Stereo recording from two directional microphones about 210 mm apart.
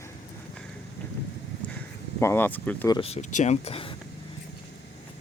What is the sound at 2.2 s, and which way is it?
Speech, 10° left (ahead or behind).